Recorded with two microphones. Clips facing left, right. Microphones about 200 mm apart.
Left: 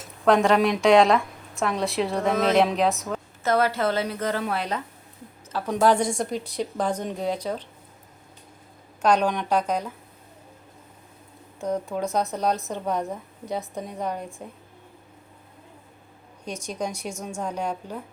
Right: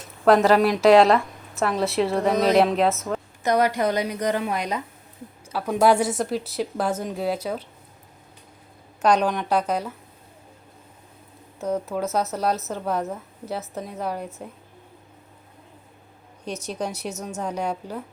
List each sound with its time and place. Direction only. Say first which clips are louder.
0.0 s a woman's voice: right 2 dB; centre (ahead or behind)
3.4 s a woman's voice: right 1 dB; 15° right (ahead or behind)
9.0 s a woman's voice: right 1 dB; 5° right (ahead or behind)
11.6 s a woman's voice: right 1 dB; 5° right (ahead or behind)
13.7 s a woman's voice: right 1 dB; 5° right (ahead or behind)
16.5 s speech: right 1 dB; 10° left (ahead or behind)
17.4 s a woman's voice: right 2 dB; 10° right (ahead or behind)